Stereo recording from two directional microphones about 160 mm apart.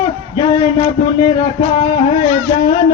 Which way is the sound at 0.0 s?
35° left (ahead or behind).